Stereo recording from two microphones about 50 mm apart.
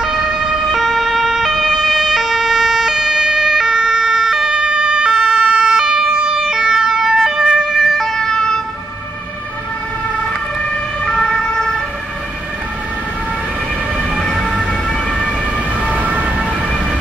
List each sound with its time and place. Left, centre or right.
0.0 s ambulance: centre
11.1 s ambulance: centre
15.9 s emergency vehicle: right